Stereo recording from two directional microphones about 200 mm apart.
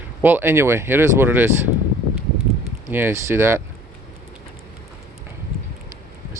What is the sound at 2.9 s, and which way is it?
Speech, 10° right (ahead or behind).